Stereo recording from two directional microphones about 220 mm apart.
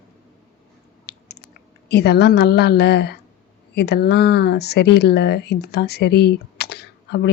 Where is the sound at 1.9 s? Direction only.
50° left (ahead or behind).